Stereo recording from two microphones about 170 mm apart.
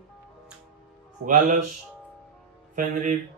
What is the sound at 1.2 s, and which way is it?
Speech, 50° right (ahead or behind).